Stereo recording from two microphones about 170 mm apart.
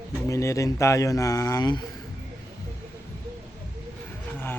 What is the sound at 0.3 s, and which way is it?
Speech, 20° left (ahead or behind).